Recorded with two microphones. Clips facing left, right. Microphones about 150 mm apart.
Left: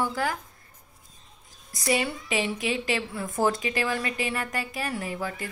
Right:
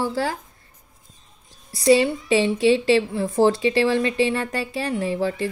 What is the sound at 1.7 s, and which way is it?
A woman's voice, 30° right (ahead or behind).